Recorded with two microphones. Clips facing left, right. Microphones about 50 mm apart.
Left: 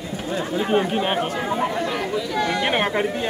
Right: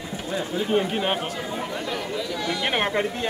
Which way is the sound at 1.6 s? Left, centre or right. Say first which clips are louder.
Left 5 dB; left.